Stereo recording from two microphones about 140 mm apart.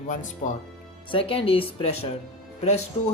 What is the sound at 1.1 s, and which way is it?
Speech, 40° left (ahead or behind).